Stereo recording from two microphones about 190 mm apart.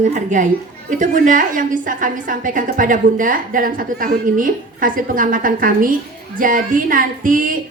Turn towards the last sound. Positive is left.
turn(degrees=-45)  # may be behind; listen again after turning